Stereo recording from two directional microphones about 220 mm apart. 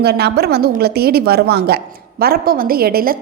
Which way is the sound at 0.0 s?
45° right (ahead or behind).